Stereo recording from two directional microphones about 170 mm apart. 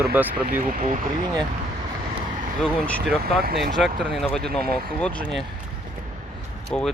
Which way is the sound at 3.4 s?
65° right (ahead or behind).